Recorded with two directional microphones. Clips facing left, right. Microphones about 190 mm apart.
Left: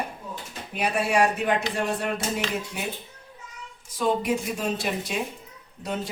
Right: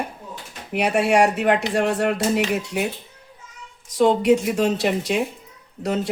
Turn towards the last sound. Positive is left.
turn(degrees=-70)  # may be behind; listen again after turning